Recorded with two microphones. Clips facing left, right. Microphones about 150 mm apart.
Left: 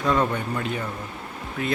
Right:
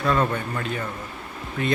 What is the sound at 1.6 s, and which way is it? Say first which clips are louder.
Speech: right 2 dB; 5° left (ahead or behind).